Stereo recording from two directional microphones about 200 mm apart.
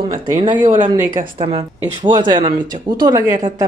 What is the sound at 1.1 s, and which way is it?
Speech, 25° right (ahead or behind).